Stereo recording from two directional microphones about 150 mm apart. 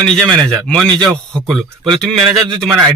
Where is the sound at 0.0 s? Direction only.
5° left (ahead or behind).